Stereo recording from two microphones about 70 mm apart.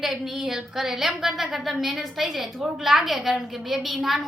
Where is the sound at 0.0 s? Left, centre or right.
Centre.